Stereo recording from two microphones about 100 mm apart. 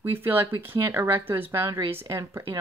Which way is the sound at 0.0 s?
25° right (ahead or behind).